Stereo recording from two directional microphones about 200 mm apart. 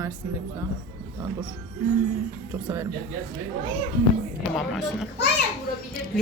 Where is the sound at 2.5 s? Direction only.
10° right (ahead or behind).